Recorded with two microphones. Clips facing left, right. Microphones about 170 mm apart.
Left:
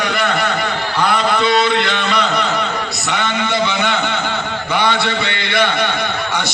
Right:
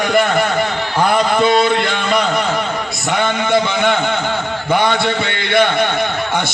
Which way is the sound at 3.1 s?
50° right (ahead or behind).